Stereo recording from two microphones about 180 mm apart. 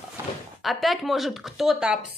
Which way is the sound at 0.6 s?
Centre (ahead or behind).